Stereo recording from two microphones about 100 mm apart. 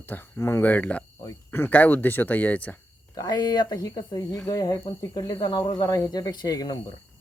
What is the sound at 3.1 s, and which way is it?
Speech, 40° left (ahead or behind).